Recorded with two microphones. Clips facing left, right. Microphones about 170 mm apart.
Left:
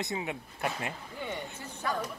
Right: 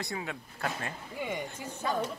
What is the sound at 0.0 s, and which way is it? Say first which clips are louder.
Speech: left 2 dB; 20° left (ahead or behind).